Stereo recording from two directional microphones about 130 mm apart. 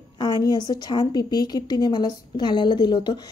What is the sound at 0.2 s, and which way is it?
A woman's voice, 30° left (ahead or behind).